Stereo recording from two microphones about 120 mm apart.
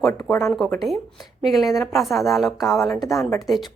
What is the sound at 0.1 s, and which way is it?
Speech, 20° left (ahead or behind).